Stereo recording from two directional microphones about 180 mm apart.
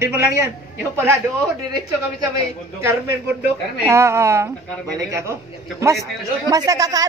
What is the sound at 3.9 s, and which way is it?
Speech, 15° right (ahead or behind).